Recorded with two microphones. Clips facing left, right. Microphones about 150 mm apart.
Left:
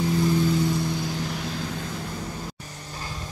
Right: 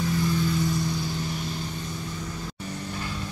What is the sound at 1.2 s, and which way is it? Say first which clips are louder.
Vehicle: left 1 dB; 90° left.